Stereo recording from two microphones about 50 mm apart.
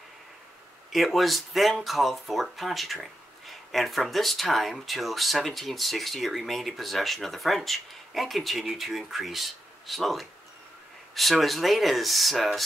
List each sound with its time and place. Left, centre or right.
0.9 s speech: centre